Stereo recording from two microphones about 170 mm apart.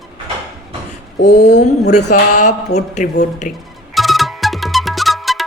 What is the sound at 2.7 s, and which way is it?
Speech, 45° left (ahead or behind).